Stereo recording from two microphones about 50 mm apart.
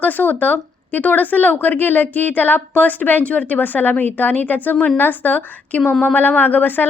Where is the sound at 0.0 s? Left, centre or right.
Left.